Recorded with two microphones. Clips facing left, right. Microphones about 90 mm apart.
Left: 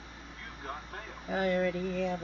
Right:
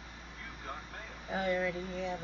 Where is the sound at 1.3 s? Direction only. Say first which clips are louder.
Left 3 dB; 85° left.